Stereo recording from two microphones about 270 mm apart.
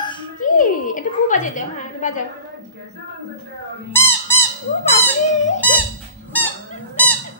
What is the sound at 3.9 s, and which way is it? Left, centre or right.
Squeak, centre.